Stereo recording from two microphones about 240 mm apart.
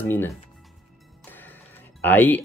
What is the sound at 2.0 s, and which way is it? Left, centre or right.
Speech, centre.